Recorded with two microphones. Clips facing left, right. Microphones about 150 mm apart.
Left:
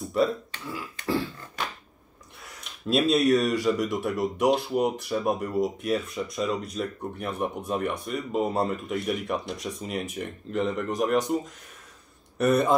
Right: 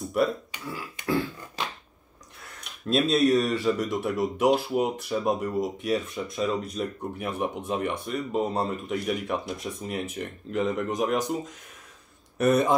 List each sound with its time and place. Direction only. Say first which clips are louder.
0.0 s a sound: left 1 dB; centre (ahead or behind)
0.7 s beatboxing: even; centre (ahead or behind)
2.4 s speech: left 1 dB; centre (ahead or behind)